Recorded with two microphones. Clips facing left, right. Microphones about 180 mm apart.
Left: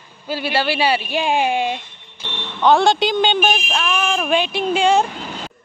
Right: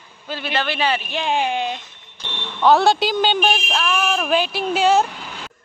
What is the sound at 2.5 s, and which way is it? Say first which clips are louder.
A woman's voice: left 1 dB; 5° right (ahead or behind).